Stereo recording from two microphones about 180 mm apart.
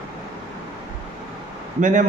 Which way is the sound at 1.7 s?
45° right (ahead or behind).